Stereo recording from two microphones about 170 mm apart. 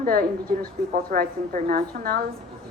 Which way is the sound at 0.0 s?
60° right (ahead or behind).